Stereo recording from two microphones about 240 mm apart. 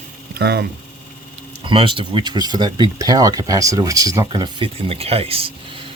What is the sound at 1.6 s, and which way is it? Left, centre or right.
Speech, right.